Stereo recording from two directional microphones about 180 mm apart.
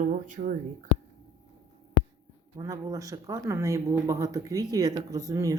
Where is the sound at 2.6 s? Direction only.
20° right (ahead or behind).